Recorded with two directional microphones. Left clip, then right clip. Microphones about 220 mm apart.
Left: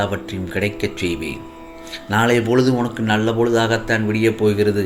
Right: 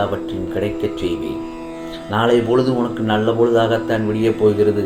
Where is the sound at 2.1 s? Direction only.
50° left (ahead or behind).